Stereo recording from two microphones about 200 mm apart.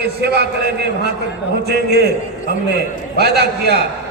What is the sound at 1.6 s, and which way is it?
Speech, 55° right (ahead or behind).